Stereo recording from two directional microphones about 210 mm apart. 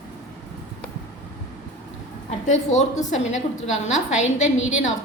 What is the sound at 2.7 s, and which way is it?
A woman's voice, 35° left (ahead or behind).